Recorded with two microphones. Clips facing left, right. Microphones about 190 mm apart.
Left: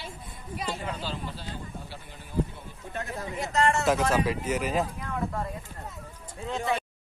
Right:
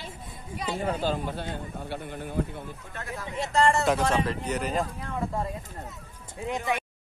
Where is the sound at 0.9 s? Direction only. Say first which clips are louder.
Right 7 dB; 50° right (ahead or behind).